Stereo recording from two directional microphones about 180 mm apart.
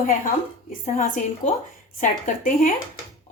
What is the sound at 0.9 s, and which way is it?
Speech, 45° left (ahead or behind).